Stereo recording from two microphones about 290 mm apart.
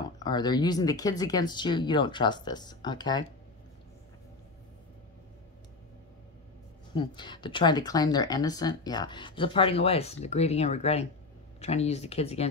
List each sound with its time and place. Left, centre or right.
0.2 s speech: centre
6.9 s speech: centre